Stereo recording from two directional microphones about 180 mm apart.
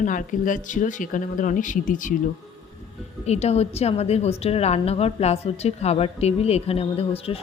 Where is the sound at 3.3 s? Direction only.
35° left (ahead or behind).